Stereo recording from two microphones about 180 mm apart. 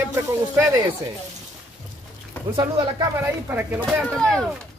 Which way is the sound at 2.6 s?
20° right (ahead or behind).